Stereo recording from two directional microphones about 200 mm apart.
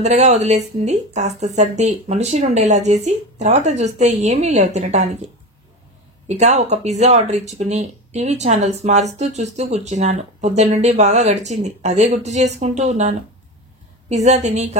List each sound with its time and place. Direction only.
0.0 s speech: 35° right (ahead or behind)
6.2 s speech: 35° right (ahead or behind)